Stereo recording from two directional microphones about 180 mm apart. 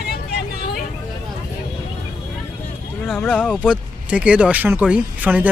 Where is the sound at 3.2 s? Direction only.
10° left (ahead or behind).